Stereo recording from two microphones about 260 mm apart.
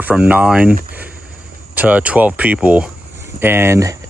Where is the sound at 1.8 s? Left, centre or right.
Centre.